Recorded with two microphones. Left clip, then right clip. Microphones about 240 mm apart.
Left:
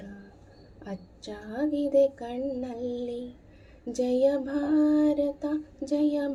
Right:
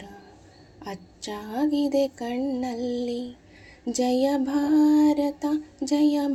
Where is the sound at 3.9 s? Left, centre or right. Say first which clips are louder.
Right 1 dB; right.